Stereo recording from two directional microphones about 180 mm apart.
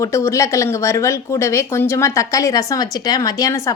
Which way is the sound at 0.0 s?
15° left (ahead or behind).